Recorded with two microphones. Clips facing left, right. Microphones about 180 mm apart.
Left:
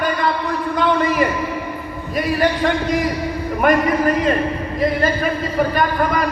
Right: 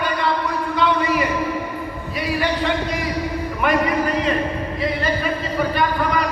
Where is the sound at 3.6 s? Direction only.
45° left (ahead or behind).